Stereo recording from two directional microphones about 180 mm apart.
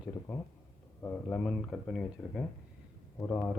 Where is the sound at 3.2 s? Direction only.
15° left (ahead or behind).